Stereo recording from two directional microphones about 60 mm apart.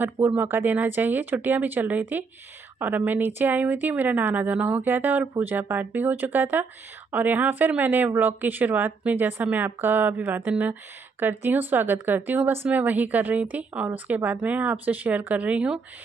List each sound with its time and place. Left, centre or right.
0.3 s speech: right